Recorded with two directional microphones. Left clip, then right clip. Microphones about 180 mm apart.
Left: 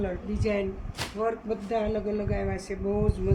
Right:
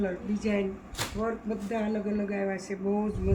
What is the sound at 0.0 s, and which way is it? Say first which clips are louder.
Speech: left 1 dB; 60° left (ahead or behind).